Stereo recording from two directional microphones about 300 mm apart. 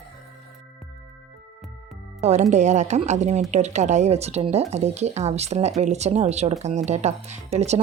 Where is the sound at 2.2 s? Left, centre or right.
Right.